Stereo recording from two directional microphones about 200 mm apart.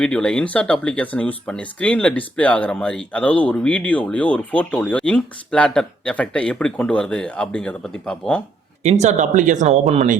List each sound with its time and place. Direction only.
0.0 s speech: 5° left (ahead or behind)
8.8 s speech: 35° right (ahead or behind)